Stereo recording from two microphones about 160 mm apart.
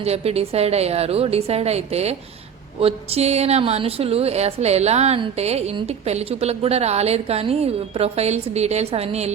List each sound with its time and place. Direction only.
0.0 s a woman's voice: 40° right (ahead or behind)